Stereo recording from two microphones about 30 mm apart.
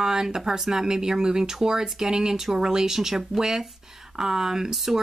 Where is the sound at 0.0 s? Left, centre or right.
Right.